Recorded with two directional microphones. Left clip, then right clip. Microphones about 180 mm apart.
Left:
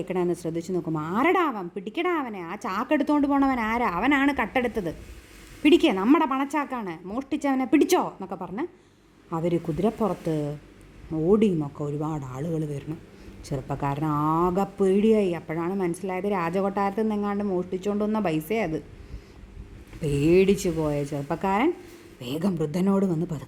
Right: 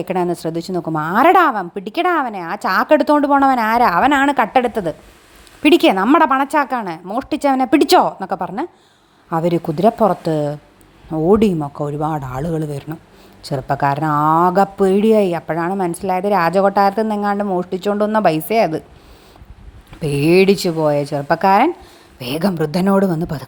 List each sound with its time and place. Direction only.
0.0 s a woman's voice: 15° right (ahead or behind)
20.0 s a woman's voice: 15° right (ahead or behind)